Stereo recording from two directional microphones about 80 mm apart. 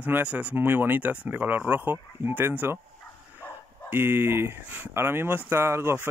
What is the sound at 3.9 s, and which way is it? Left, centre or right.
Speech, right.